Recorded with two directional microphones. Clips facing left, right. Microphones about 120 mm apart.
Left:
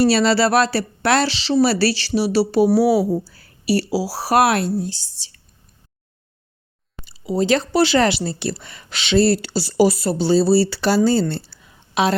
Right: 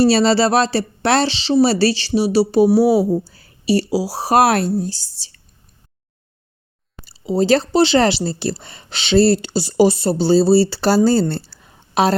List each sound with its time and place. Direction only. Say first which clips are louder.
0.0 s speech: right 2 dB; 30° right (ahead or behind)
4.4 s speech: right 2 dB; 40° right (ahead or behind)
7.0 s speech: right 3 dB; 30° right (ahead or behind)
9.4 s speech: right 2 dB; 20° right (ahead or behind); by 12.1 s 40° right (ahead or behind)